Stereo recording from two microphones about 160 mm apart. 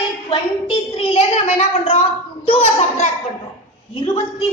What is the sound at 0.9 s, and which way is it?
A woman's voice, 40° left (ahead or behind).